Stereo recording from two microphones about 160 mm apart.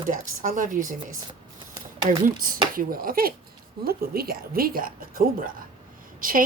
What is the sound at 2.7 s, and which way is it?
Speech, 60° right (ahead or behind).